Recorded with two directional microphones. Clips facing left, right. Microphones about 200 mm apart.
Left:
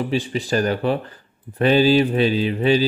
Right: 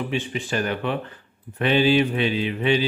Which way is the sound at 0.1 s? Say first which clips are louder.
Left 5 dB; 35° left (ahead or behind).